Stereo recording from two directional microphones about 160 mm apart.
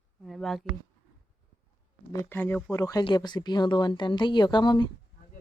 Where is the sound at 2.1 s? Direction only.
15° left (ahead or behind).